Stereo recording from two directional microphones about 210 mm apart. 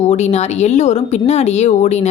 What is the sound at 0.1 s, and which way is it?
A woman's voice, 30° left (ahead or behind).